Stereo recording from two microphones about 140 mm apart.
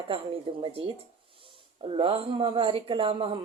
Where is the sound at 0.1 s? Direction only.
40° right (ahead or behind).